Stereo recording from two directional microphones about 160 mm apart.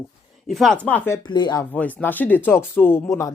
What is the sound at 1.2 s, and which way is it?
Speech, 30° left (ahead or behind).